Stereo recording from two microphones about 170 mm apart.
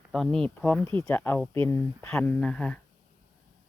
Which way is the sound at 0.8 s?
30° right (ahead or behind).